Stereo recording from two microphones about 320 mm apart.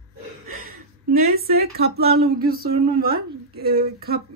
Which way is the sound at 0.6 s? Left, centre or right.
Right.